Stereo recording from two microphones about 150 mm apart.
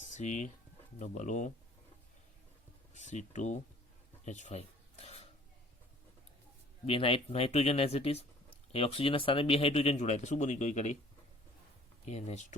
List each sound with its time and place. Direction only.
0.1 s speech: 50° left (ahead or behind)
2.9 s speech: 50° left (ahead or behind)
4.3 s a sound: 50° left (ahead or behind)
6.8 s speech: 40° left (ahead or behind)
12.0 s speech: 50° left (ahead or behind)